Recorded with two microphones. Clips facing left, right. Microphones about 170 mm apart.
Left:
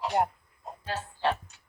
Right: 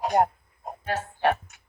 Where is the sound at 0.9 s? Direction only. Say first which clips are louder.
Right 5 dB; 65° right (ahead or behind).